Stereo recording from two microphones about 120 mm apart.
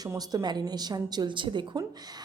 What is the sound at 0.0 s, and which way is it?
A woman's voice, 30° right (ahead or behind).